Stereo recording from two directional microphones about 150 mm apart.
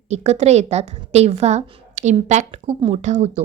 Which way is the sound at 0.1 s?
45° right (ahead or behind).